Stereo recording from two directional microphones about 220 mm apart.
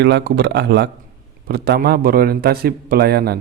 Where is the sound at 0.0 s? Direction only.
45° right (ahead or behind).